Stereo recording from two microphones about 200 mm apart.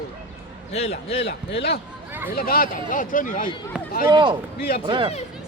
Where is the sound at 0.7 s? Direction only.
30° left (ahead or behind).